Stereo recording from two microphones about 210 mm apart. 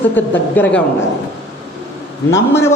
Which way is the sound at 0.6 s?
5° left (ahead or behind).